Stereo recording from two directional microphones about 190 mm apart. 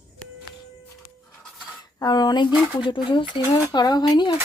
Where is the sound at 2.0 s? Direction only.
20° left (ahead or behind).